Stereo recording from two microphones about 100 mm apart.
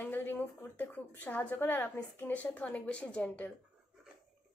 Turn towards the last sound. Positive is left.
turn(degrees=15)  # may be behind; listen again after turning